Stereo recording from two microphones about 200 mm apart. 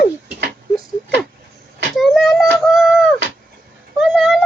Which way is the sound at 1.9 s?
Centre (ahead or behind).